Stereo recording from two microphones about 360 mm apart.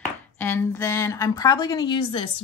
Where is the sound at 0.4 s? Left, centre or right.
Centre.